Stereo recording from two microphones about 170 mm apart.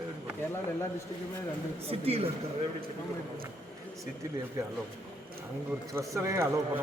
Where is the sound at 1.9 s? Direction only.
35° right (ahead or behind).